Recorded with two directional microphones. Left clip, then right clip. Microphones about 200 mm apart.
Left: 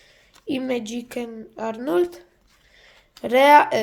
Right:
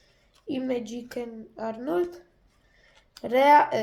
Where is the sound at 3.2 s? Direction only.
35° left (ahead or behind).